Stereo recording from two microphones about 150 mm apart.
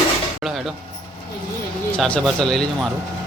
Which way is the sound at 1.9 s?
5° left (ahead or behind).